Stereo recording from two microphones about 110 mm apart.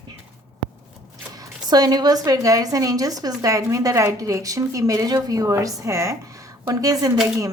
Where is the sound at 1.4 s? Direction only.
35° right (ahead or behind).